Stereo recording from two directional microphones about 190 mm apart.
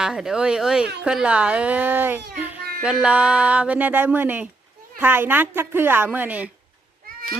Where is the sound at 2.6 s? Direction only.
50° right (ahead or behind).